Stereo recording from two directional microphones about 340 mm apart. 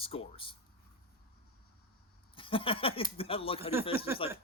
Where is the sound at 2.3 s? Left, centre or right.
Centre.